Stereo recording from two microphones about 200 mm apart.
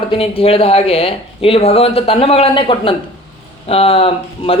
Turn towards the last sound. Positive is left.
turn(degrees=30)  # may be behind; listen again after turning